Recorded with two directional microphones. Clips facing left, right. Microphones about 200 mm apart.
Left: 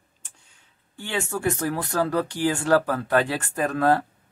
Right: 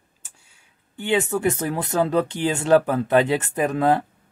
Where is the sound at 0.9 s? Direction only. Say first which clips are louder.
Right 7 dB; 20° right (ahead or behind).